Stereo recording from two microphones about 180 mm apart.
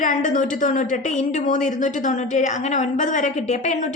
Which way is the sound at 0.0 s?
45° left (ahead or behind).